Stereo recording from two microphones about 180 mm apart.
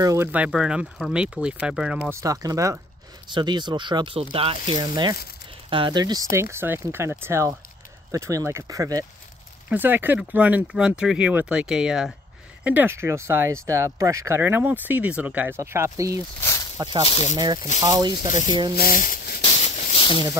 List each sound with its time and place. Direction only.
0.0 s speech: 15° right (ahead or behind)
2.0 s speech: 15° right (ahead or behind)
6.3 s speech: 15° right (ahead or behind)
16.3 s snake: 15° left (ahead or behind)
16.7 s speech: 25° right (ahead or behind)
17.0 s speech: 35° left (ahead or behind)
17.7 s speech: 25° right (ahead or behind)
18.8 s speech: 50° left (ahead or behind)
19.4 s a sound: 40° left (ahead or behind)